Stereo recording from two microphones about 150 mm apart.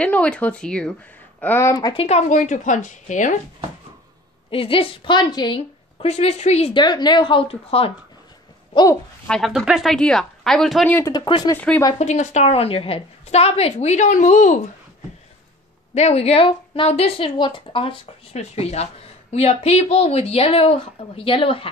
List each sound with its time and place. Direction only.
0.0 s speech: 10° left (ahead or behind)
2.0 s a woman's voice: 45° left (ahead or behind)
4.5 s a woman's voice: 35° left (ahead or behind)
6.7 s a woman's voice: 30° left (ahead or behind)
9.3 s speech: centre (ahead or behind)
10.9 s speech: 15° left (ahead or behind)
11.1 s a woman's voice: 30° left (ahead or behind)
11.5 s speech: 10° left (ahead or behind)
12.0 s speech: 50° left (ahead or behind)
15.9 s speech: 45° left (ahead or behind)